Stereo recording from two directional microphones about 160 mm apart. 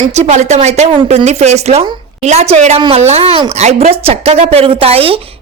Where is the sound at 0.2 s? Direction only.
45° right (ahead or behind).